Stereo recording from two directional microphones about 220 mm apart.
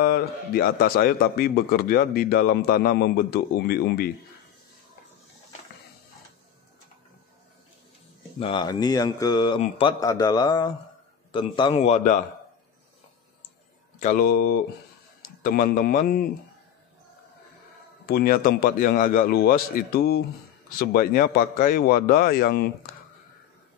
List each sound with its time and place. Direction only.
0.0 s a man's voice: 45° left (ahead or behind)
8.4 s a man's voice: 25° left (ahead or behind)
13.9 s a man's voice: 40° left (ahead or behind)
18.0 s a man's voice: 45° left (ahead or behind)